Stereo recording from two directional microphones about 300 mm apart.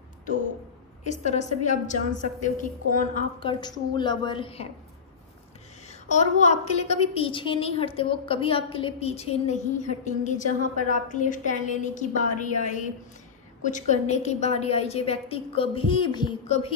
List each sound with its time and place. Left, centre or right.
1.0 s a woman's voice: left
5.9 s a woman's voice: left